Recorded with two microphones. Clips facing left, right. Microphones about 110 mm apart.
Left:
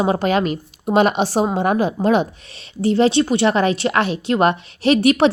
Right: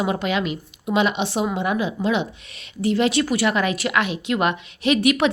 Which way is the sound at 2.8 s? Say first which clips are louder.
Left 4 dB; 30° left (ahead or behind).